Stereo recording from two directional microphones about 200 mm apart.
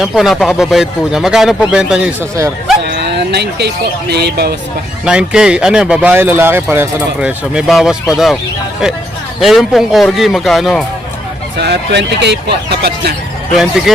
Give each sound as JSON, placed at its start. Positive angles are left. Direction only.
{"t": 0.0, "sound": "speech", "side_deg": 0}
{"t": 2.8, "sound": "a sound", "side_deg": -55}
{"t": 4.1, "sound": "speech", "side_deg": -55}
{"t": 5.0, "sound": "speech", "side_deg": -5}
{"t": 9.4, "sound": "speech", "side_deg": 0}
{"t": 11.5, "sound": "speech", "side_deg": -55}
{"t": 13.6, "sound": "speech", "side_deg": 0}